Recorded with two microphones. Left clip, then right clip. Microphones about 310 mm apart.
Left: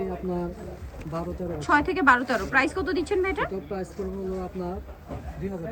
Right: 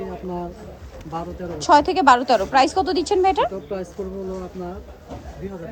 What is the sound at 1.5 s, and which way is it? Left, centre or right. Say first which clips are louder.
A woman's voice: right 8 dB; centre.